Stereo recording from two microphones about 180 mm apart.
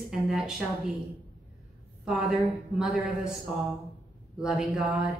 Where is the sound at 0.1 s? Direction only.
5° right (ahead or behind).